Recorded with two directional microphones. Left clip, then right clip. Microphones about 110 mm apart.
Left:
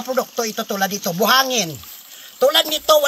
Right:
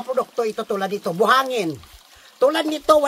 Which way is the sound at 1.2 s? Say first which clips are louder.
Left 1 dB; 40° right (ahead or behind).